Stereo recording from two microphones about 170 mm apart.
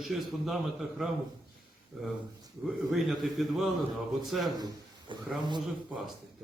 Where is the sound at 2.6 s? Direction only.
Centre (ahead or behind).